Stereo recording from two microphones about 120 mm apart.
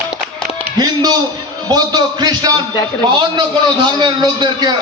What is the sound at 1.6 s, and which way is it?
A man's voice, 35° right (ahead or behind).